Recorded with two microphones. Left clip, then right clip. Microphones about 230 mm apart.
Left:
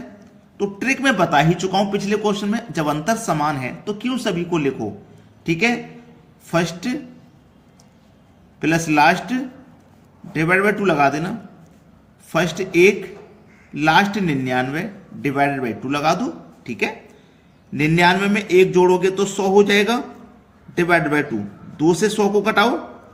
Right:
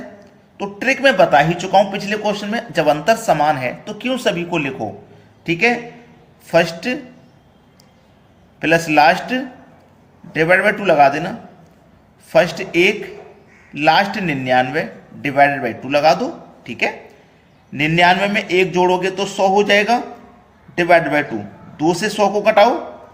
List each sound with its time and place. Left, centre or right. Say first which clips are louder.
0.6 s a man's voice: right 4 dB; left
8.5 s a man's voice: right 4 dB; left
22.3 s a man's voice: right 7 dB; left